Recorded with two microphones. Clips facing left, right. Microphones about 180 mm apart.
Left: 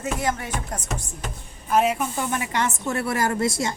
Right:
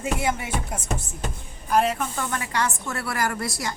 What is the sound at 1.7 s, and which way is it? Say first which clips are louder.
A woman's voice: left 1 dB; 5° left (ahead or behind).